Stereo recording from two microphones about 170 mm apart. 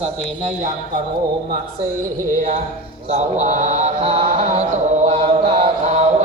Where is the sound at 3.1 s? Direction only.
45° right (ahead or behind).